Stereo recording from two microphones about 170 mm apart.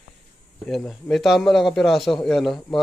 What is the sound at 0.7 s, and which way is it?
Speech, centre (ahead or behind).